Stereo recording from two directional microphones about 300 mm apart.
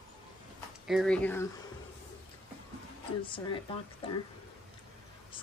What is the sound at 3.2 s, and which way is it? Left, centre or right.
Speech, centre.